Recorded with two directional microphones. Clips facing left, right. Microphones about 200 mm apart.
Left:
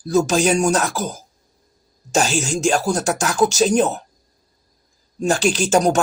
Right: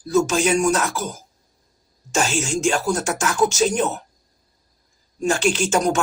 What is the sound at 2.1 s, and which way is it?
Speech, 35° left (ahead or behind).